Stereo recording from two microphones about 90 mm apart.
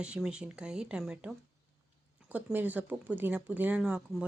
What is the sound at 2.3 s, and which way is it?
Speech, 20° right (ahead or behind).